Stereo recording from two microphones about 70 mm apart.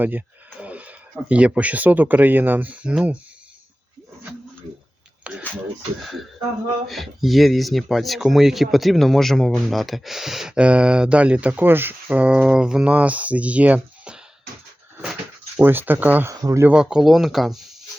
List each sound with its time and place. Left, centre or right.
0.6 s a sound: right
1.3 s speech: centre
5.2 s a sound: centre
6.8 s speech: centre
11.6 s speech: right
15.5 s speech: right
16.3 s speech: right
16.7 s speech: centre